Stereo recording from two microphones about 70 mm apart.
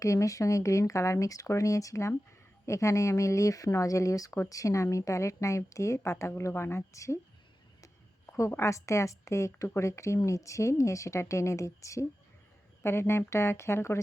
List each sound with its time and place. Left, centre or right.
0.0 s a woman's voice: left
8.4 s a woman's voice: left